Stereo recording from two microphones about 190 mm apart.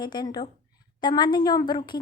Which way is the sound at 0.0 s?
20° left (ahead or behind).